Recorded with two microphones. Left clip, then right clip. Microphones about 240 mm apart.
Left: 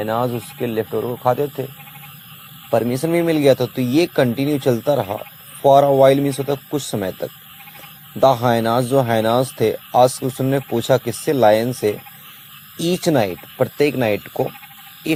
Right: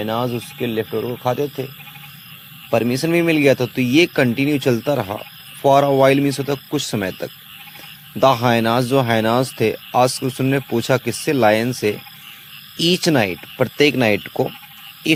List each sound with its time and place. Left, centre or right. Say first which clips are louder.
0.0 s speech: left 2 dB; right
0.3 s speech: even; centre
2.6 s speech: even; right
4.9 s speech: left 2 dB; right
5.6 s speech: left 2 dB; right
8.2 s speech: even; right